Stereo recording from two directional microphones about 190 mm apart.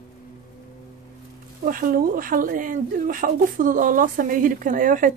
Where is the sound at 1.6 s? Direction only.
45° right (ahead or behind).